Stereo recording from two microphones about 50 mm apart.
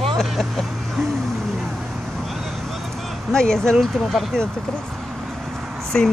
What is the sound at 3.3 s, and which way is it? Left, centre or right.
Speech, centre.